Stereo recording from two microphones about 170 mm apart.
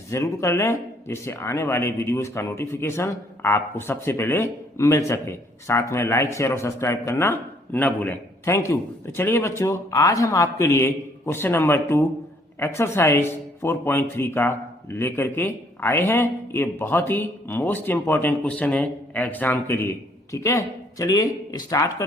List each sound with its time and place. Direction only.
0.1 s a man's voice: 15° left (ahead or behind)